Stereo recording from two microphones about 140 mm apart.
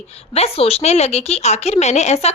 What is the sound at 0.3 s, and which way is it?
A woman's voice, 45° left (ahead or behind).